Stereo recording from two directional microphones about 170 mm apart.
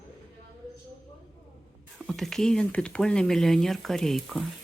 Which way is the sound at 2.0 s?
Centre (ahead or behind).